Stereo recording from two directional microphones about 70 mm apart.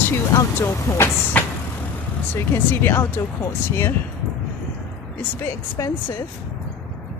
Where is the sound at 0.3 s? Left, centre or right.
Left.